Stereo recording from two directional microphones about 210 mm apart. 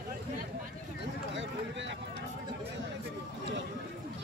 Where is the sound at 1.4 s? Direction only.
60° right (ahead or behind).